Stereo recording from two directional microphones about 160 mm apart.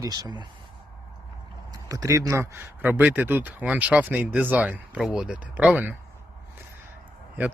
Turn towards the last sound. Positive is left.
turn(degrees=-10)  # may be behind; listen again after turning